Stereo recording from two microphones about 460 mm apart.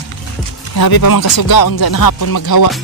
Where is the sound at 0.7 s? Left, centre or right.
Left.